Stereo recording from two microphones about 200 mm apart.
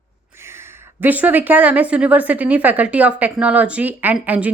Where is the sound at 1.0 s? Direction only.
10° right (ahead or behind).